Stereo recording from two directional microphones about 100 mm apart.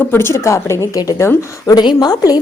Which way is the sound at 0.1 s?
25° left (ahead or behind).